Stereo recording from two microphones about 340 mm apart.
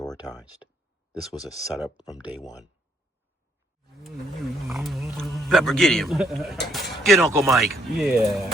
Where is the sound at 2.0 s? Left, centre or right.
Centre.